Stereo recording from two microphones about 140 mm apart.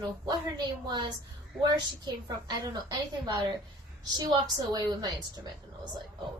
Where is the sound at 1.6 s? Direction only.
30° right (ahead or behind).